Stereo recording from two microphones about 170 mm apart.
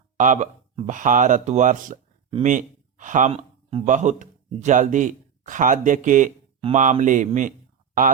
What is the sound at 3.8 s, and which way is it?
A man's voice, 45° right (ahead or behind).